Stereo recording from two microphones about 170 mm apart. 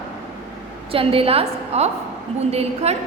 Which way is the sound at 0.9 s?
35° right (ahead or behind).